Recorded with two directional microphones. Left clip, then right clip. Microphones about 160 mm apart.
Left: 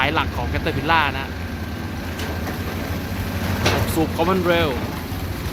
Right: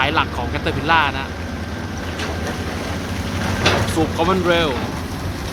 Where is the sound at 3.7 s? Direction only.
35° right (ahead or behind).